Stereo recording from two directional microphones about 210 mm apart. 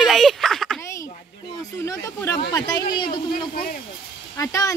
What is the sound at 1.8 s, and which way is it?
Speech, 15° left (ahead or behind).